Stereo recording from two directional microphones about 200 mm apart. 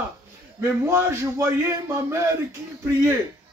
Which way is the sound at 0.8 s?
15° right (ahead or behind).